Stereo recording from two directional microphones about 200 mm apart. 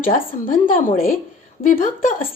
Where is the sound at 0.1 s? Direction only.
45° left (ahead or behind).